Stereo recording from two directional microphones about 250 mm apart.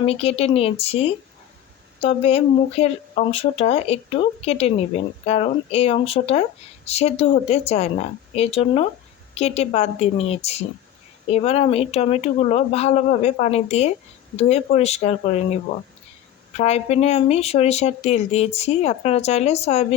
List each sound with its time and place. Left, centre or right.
0.0 s speech: left
16.6 s speech: left